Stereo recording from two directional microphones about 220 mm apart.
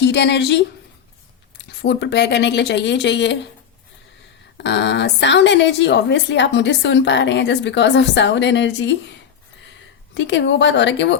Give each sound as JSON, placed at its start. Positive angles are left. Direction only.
{"t": 0.0, "sound": "a woman's voice", "side_deg": 50}
{"t": 4.5, "sound": "a woman's voice", "side_deg": 50}
{"t": 10.2, "sound": "a woman's voice", "side_deg": 55}